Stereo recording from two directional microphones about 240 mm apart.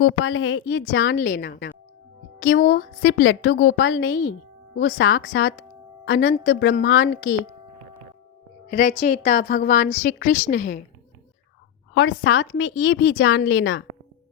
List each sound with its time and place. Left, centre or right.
0.0 s a woman's voice: left
1.1 s a woman's voice: left
2.7 s a woman's voice: left
8.7 s a woman's voice: left
11.9 s a woman's voice: left